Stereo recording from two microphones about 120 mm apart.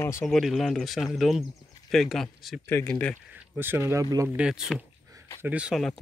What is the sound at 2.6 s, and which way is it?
Speech, 20° left (ahead or behind).